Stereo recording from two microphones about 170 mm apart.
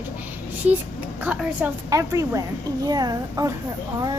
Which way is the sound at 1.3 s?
10° right (ahead or behind).